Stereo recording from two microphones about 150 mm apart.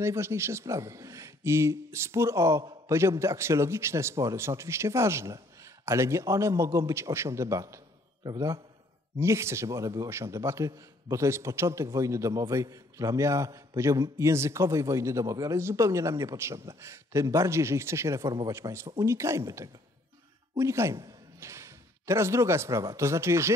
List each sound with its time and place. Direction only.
0.0 s a man's voice: 20° right (ahead or behind)